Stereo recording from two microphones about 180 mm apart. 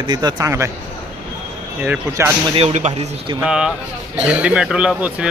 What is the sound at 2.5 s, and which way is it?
Speech, 35° right (ahead or behind).